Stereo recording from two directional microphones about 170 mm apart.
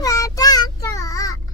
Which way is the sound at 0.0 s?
20° left (ahead or behind).